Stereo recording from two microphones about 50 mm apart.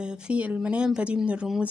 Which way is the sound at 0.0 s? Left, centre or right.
Centre.